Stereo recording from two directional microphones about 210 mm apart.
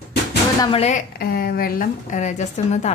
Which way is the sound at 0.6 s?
25° left (ahead or behind).